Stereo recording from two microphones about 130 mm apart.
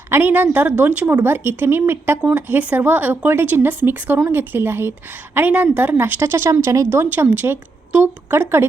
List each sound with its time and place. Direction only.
0.1 s speech: 15° right (ahead or behind)